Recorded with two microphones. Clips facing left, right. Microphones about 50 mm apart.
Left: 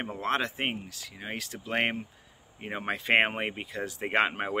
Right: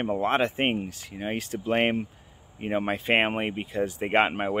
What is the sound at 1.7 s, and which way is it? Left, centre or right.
Speech, centre.